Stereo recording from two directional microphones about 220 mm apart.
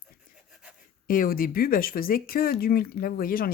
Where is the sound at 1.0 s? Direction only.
40° left (ahead or behind).